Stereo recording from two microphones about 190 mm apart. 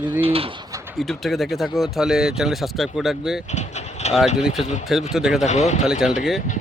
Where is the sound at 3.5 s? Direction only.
35° left (ahead or behind).